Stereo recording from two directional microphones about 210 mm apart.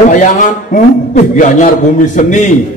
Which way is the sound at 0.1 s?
40° left (ahead or behind).